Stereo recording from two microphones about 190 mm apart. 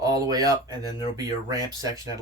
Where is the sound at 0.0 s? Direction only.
20° right (ahead or behind).